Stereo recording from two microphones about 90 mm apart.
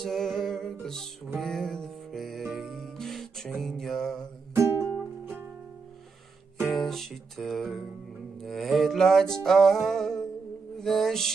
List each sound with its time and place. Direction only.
0.0 s music: 5° left (ahead or behind)
6.6 s music: centre (ahead or behind)